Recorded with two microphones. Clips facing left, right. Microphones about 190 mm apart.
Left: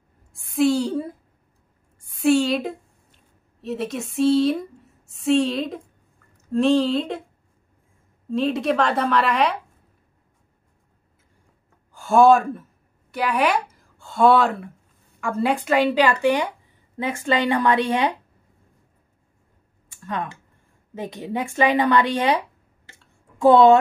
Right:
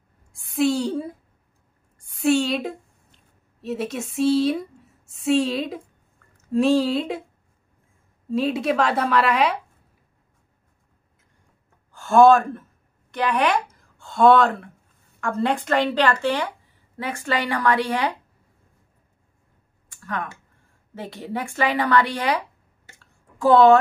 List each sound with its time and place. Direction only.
0.3 s a woman's voice: centre (ahead or behind)
8.3 s a woman's voice: 5° right (ahead or behind)
11.9 s speech: 10° left (ahead or behind)
19.9 s a sound: 20° left (ahead or behind)
20.9 s speech: 20° left (ahead or behind)
23.4 s speech: 20° left (ahead or behind)